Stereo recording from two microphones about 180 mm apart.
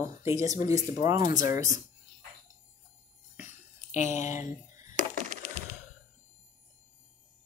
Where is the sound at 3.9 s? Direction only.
40° left (ahead or behind).